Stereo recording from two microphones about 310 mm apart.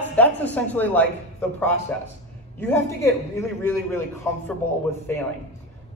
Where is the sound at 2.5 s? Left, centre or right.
Centre.